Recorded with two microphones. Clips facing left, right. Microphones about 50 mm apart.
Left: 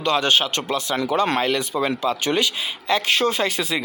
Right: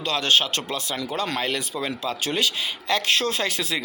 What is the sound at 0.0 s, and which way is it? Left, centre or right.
Speech, left.